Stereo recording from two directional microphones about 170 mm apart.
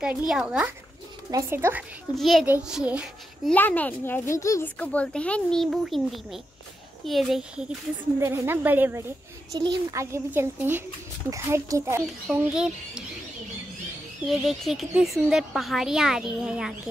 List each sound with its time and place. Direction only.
0.3 s a child's voice: 5° right (ahead or behind)
2.1 s speech: centre (ahead or behind)
2.4 s a child's voice: 10° right (ahead or behind)
3.4 s a child's voice: 10° left (ahead or behind); by 9.0 s 10° right (ahead or behind)
9.5 s a child's voice: 25° right (ahead or behind)
12.4 s speech: 5° right (ahead or behind)
14.2 s speech: centre (ahead or behind)